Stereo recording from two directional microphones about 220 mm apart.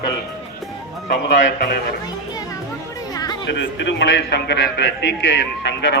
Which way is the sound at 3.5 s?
55° left (ahead or behind).